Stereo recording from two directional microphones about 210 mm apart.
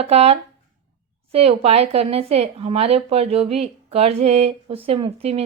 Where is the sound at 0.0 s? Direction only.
30° right (ahead or behind).